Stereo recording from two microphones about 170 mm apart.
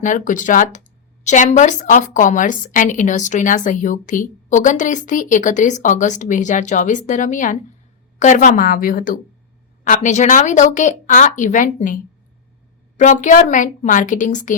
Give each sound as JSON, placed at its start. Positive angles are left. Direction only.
{"t": 0.0, "sound": "a woman's voice", "side_deg": 50}
{"t": 8.4, "sound": "a woman's voice", "side_deg": 55}
{"t": 13.0, "sound": "a woman's voice", "side_deg": 50}